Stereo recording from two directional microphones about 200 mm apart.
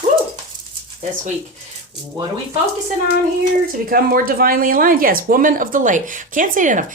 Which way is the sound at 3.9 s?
45° right (ahead or behind).